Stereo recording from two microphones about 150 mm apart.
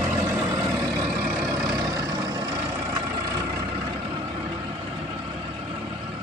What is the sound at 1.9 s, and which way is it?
Vehicle, 20° right (ahead or behind).